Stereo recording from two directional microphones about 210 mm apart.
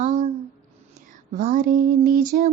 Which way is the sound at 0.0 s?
35° right (ahead or behind).